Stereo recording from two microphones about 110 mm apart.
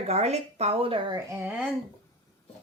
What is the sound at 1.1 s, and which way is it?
Speech, 25° right (ahead or behind).